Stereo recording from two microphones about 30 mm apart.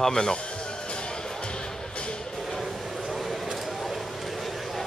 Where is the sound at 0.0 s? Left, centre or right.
Left.